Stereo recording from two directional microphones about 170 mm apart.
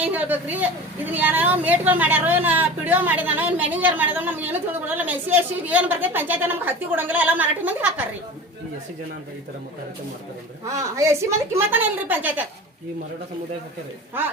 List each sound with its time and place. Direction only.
0.0 s a woman's voice: 10° right (ahead or behind)
10.7 s a woman's voice: 20° right (ahead or behind)